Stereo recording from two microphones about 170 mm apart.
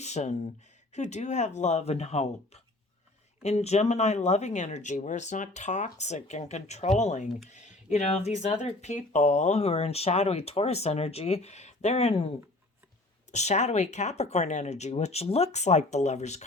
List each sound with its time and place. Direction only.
0.0 s speech: 40° left (ahead or behind)
13.3 s speech: 40° left (ahead or behind)